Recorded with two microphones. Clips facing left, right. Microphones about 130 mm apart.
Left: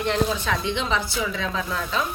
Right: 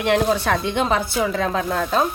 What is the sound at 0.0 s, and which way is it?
A woman's voice, 70° right (ahead or behind).